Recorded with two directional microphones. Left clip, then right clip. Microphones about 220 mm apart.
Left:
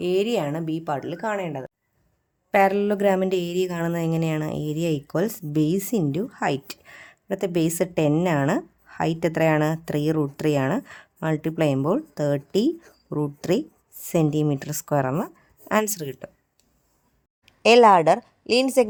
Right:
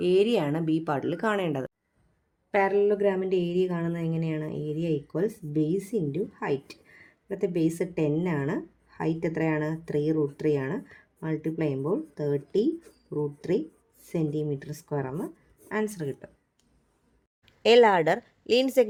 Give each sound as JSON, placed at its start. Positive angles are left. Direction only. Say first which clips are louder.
{"t": 0.0, "sound": "a woman's voice", "louder": "even", "side_deg": 15}
{"t": 2.5, "sound": "a woman's voice", "louder": "left 4 dB", "side_deg": 30}
{"t": 17.4, "sound": "a woman's voice", "louder": "left 4 dB", "side_deg": 15}